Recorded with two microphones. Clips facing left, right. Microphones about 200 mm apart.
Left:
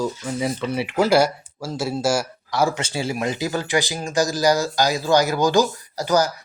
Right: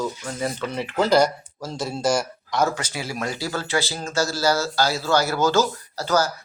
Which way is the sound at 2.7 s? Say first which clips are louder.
Left 4 dB; 30° left (ahead or behind).